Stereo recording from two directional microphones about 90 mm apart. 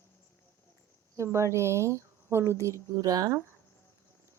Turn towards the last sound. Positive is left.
turn(degrees=-40)  # may be behind; listen again after turning